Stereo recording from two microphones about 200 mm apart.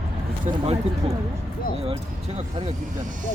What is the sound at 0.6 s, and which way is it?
Speech, 30° right (ahead or behind).